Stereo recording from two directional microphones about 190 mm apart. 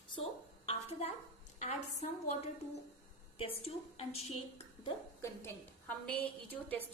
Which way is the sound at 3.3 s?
30° left (ahead or behind).